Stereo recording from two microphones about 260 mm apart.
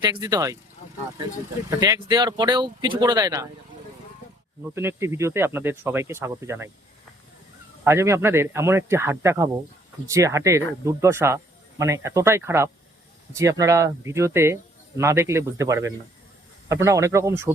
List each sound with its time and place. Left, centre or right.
0.0 s speech: centre
1.7 s speech: centre
4.7 s speech: centre
7.9 s speech: centre